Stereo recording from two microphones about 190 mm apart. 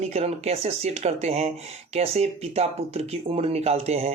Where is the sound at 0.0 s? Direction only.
35° right (ahead or behind).